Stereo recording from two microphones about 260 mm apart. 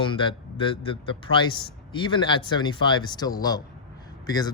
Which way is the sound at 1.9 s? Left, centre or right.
Centre.